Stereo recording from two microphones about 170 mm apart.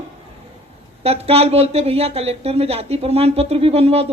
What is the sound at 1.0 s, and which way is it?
A woman's voice, 35° right (ahead or behind).